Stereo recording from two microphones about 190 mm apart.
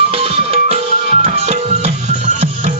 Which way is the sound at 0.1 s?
30° right (ahead or behind).